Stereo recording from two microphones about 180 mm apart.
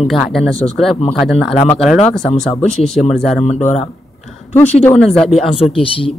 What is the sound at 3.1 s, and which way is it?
Speech, centre (ahead or behind).